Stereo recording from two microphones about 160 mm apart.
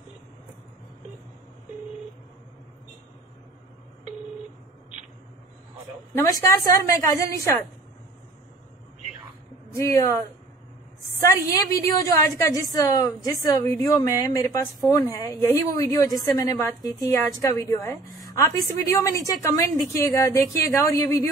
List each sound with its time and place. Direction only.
6.1 s a woman's voice: 20° left (ahead or behind)
9.8 s speech: 15° left (ahead or behind)
11.1 s a woman's voice: 20° left (ahead or behind)